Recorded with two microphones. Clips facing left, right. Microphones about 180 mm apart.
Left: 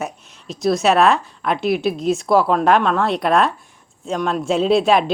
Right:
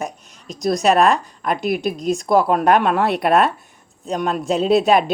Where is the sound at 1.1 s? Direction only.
45° right (ahead or behind).